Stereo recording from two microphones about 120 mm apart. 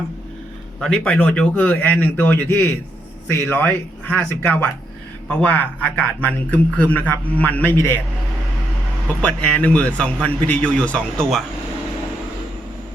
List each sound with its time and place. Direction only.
0.8 s speech: 5° left (ahead or behind)
9.2 s speech: 10° left (ahead or behind)